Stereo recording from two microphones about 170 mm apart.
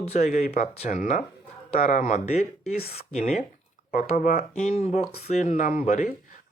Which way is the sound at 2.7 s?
65° left (ahead or behind).